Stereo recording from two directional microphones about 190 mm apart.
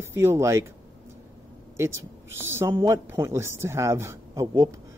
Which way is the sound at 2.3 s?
10° right (ahead or behind).